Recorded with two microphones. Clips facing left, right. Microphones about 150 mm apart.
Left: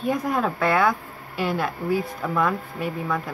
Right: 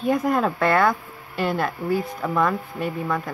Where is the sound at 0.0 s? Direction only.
Centre (ahead or behind).